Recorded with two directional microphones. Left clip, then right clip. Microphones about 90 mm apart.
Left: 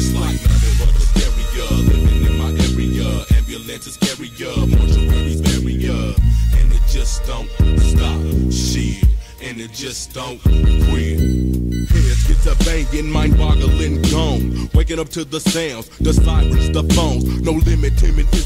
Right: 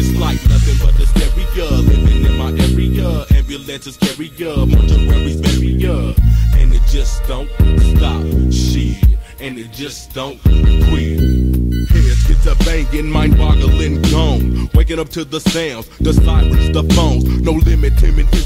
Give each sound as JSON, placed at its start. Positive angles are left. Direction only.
{"t": 0.0, "sound": "music", "side_deg": -25}
{"t": 1.1, "sound": "music", "side_deg": -50}
{"t": 1.7, "sound": "music", "side_deg": -30}
{"t": 2.5, "sound": "music", "side_deg": -50}
{"t": 5.8, "sound": "music", "side_deg": -45}
{"t": 7.5, "sound": "music", "side_deg": -55}
{"t": 10.1, "sound": "music", "side_deg": -30}
{"t": 12.9, "sound": "music", "side_deg": -50}
{"t": 14.6, "sound": "music", "side_deg": -40}
{"t": 15.3, "sound": "music", "side_deg": -25}
{"t": 17.6, "sound": "music", "side_deg": -40}